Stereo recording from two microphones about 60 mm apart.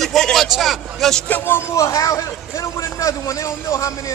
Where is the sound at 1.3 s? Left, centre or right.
Left.